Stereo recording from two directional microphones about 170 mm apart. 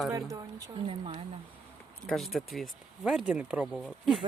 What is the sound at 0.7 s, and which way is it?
Speech, 35° right (ahead or behind).